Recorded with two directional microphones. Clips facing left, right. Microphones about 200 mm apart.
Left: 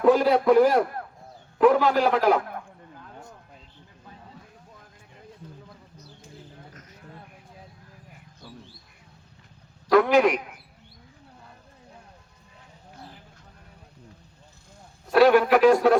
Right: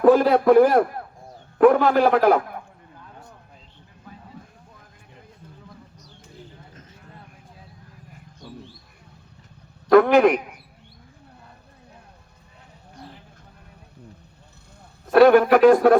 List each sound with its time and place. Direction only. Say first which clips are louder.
0.0 s a man's voice: right 3 dB; 55° right (ahead or behind)
9.9 s a man's voice: right 4 dB; 55° right (ahead or behind)
15.1 s a man's voice: right 4 dB; 50° right (ahead or behind)